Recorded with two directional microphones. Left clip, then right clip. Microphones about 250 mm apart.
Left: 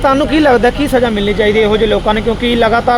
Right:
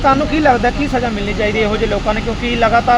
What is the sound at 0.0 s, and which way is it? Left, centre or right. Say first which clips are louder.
Speech: left 2 dB; left.